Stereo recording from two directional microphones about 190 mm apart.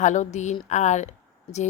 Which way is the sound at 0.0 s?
40° left (ahead or behind).